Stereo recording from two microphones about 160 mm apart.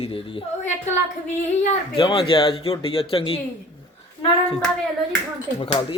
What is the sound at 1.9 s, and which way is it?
Speech, 35° left (ahead or behind).